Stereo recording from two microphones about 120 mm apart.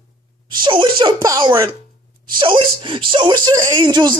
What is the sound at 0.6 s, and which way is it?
Speech, 40° right (ahead or behind).